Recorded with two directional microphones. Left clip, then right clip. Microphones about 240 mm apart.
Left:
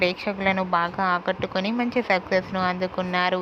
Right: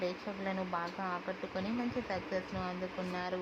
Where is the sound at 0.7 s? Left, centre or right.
Left.